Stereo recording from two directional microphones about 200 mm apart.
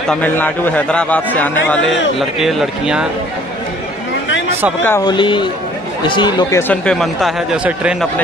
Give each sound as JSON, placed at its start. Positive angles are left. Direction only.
{"t": 0.1, "sound": "a man's voice", "side_deg": 10}
{"t": 4.8, "sound": "a man's voice", "side_deg": 10}
{"t": 5.1, "sound": "speech", "side_deg": 25}
{"t": 6.7, "sound": "speech", "side_deg": 5}